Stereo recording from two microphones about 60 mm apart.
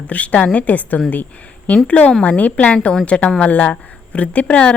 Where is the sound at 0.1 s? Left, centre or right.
Left.